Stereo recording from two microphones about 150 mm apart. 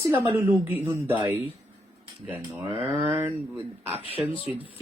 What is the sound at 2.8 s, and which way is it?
Speech, 35° right (ahead or behind).